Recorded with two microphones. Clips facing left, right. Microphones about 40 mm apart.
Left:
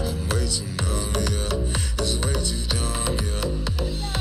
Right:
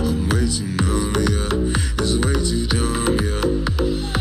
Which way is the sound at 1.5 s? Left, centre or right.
Right.